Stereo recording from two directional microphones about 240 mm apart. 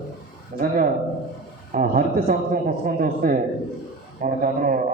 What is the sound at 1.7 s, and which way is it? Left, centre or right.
A man's voice, right.